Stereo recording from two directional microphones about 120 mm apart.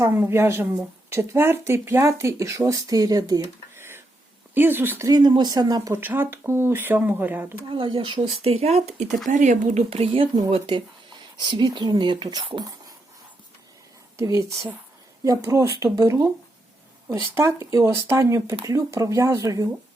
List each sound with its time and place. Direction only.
0.0 s a woman's voice: 20° right (ahead or behind)
3.8 s a sound: 20° right (ahead or behind)
4.5 s speech: 15° right (ahead or behind)
5.0 s a woman's voice: 35° right (ahead or behind)
6.0 s speech: 15° right (ahead or behind)
7.7 s speech: 45° right (ahead or behind); by 9.0 s 65° right (ahead or behind)
9.3 s speech: 90° right; by 10.2 s 55° right (ahead or behind)
10.5 s a sound: 45° right (ahead or behind)
11.5 s a woman's voice: 40° right (ahead or behind)
14.2 s a woman's voice: 25° right (ahead or behind)
17.3 s a woman's voice: 25° right (ahead or behind)